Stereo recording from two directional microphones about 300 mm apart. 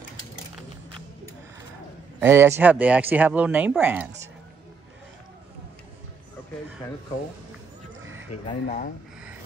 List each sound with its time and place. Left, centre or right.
2.1 s speech: centre
8.5 s speech: left